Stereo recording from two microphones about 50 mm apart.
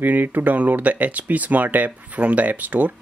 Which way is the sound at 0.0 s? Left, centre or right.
Right.